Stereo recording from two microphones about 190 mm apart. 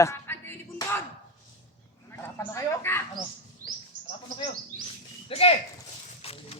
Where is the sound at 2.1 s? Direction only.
15° left (ahead or behind).